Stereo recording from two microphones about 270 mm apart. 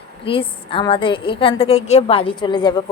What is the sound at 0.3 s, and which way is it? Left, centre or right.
A woman's voice, centre.